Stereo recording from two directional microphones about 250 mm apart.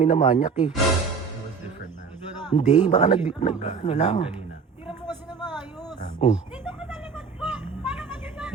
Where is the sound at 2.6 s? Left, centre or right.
Left.